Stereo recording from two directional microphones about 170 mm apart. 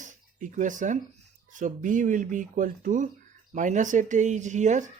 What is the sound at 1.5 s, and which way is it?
Speech, 50° right (ahead or behind).